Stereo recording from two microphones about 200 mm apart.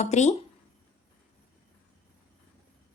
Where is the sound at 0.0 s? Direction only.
35° left (ahead or behind).